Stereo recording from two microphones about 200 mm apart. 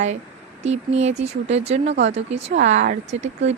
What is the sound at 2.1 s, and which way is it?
Speech, 30° right (ahead or behind).